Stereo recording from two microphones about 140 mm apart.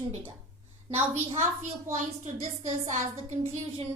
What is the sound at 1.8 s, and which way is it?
A woman's voice, 50° right (ahead or behind).